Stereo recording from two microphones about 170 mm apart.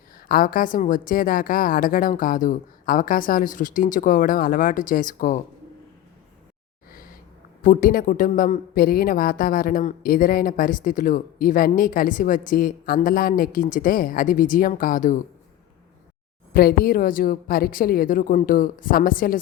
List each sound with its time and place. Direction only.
0.3 s a woman's voice: 55° left (ahead or behind)
7.6 s a woman's voice: 55° left (ahead or behind)
16.5 s speech: 60° left (ahead or behind)